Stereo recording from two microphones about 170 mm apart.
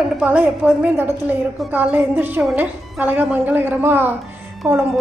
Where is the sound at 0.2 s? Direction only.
10° right (ahead or behind).